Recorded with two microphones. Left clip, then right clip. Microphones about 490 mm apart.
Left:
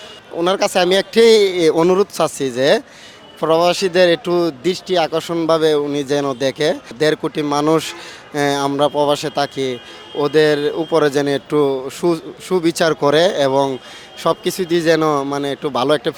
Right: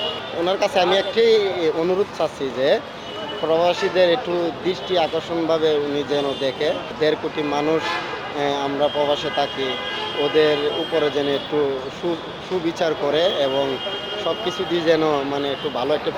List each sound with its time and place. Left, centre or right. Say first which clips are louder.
0.4 s speech: left 3 dB; left
12.6 s speech: left 6 dB; left